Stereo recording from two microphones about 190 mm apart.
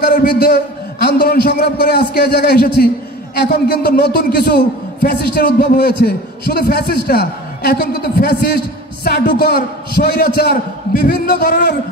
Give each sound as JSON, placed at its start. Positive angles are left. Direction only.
{"t": 0.0, "sound": "a man's voice", "side_deg": 55}
{"t": 10.9, "sound": "a man's voice", "side_deg": 50}